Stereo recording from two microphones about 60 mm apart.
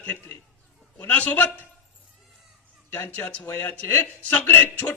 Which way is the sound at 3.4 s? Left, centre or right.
Left.